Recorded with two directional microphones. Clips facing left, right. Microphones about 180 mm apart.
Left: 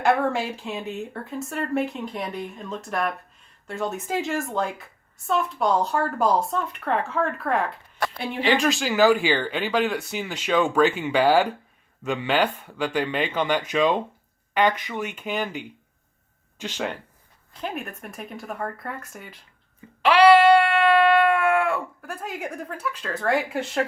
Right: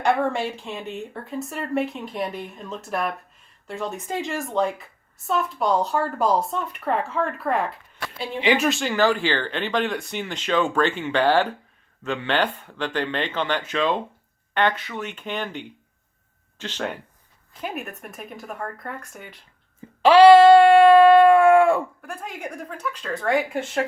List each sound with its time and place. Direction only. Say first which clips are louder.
0.0 s a woman's voice: even; centre (ahead or behind)
17.6 s a woman's voice: even; 5° right (ahead or behind)
20.1 s a sound: right 4 dB; 25° right (ahead or behind)
22.0 s a woman's voice: left 1 dB; centre (ahead or behind)